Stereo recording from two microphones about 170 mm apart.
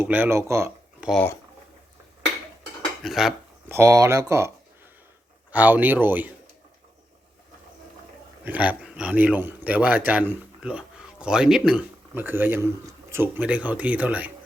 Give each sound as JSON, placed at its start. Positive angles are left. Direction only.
{"t": 0.0, "sound": "speech", "side_deg": -10}
{"t": 3.0, "sound": "dishes", "side_deg": 0}
{"t": 3.7, "sound": "speech", "side_deg": -15}
{"t": 8.4, "sound": "speech", "side_deg": -10}